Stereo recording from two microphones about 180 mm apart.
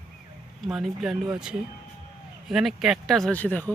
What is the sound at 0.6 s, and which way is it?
Speech, centre (ahead or behind).